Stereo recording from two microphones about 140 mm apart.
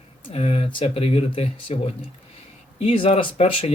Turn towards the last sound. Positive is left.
turn(degrees=40)  # may be behind; listen again after turning